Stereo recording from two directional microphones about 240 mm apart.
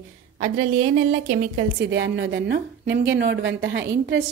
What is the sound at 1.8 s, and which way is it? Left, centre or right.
A woman's voice, right.